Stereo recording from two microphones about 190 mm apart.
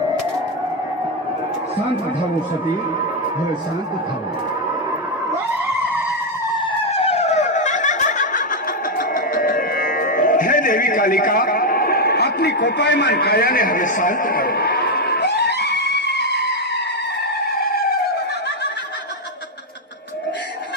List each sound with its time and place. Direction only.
5.3 s skidding: 10° right (ahead or behind)
6.9 s snicker: 35° left (ahead or behind)
9.0 s music: 45° left (ahead or behind)
17.4 s a sound: 50° left (ahead or behind)